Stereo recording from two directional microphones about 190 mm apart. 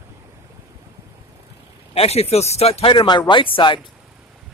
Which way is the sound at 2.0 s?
35° left (ahead or behind).